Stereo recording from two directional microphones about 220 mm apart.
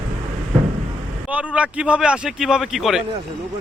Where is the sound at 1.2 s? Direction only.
5° right (ahead or behind).